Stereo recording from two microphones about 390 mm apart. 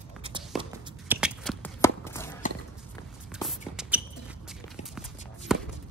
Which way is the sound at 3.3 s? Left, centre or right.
Centre.